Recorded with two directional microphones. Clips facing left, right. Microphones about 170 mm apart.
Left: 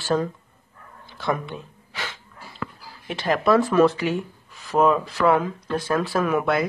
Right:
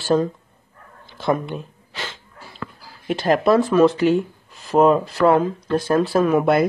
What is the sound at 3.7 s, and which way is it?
Speech, 25° right (ahead or behind).